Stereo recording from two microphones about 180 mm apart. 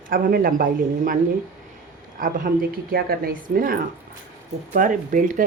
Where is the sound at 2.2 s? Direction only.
50° right (ahead or behind).